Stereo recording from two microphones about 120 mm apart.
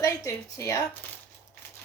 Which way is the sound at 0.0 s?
30° left (ahead or behind).